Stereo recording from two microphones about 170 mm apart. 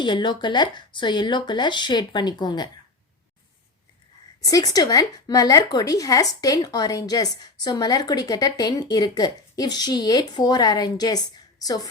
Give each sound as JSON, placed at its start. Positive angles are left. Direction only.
{"t": 0.0, "sound": "a woman's voice", "side_deg": 25}
{"t": 4.4, "sound": "a woman's voice", "side_deg": 20}